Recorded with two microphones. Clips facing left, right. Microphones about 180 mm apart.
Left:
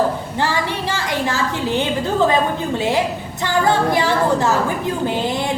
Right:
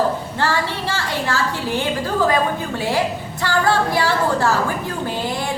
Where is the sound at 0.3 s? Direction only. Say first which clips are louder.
Left 1 dB; 15° left (ahead or behind).